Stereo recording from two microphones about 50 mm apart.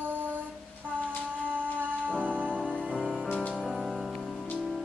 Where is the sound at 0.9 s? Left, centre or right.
Right.